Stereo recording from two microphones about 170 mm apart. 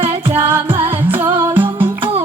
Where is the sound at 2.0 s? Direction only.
35° right (ahead or behind).